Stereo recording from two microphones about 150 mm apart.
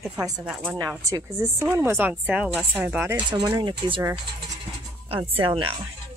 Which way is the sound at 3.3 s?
30° right (ahead or behind).